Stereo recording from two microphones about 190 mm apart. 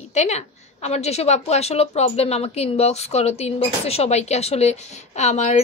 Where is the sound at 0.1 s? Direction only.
35° left (ahead or behind).